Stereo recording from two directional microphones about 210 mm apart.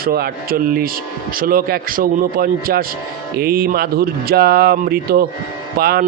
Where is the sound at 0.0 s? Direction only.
45° right (ahead or behind).